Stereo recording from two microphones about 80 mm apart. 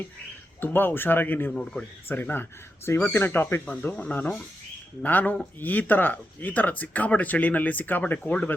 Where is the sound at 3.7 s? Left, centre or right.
Centre.